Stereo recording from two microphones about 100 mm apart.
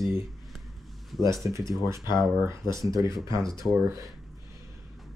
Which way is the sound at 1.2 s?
30° right (ahead or behind).